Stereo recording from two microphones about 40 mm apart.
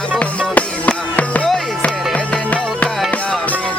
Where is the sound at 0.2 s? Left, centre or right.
Left.